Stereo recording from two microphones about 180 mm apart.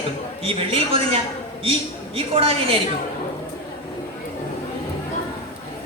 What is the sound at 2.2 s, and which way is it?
Speech, 30° right (ahead or behind).